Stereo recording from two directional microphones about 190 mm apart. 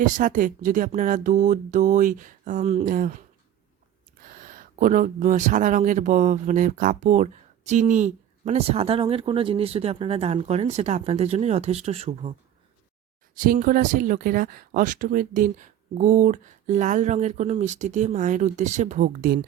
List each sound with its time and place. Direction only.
0.0 s speech: 45° right (ahead or behind)
13.3 s speech: 45° right (ahead or behind)